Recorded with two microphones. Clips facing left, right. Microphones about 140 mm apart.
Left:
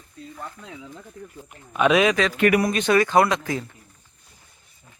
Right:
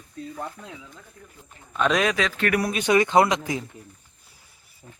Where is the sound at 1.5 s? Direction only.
10° left (ahead or behind).